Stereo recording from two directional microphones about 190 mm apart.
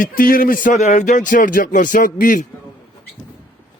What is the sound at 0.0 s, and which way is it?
Speech, 50° left (ahead or behind).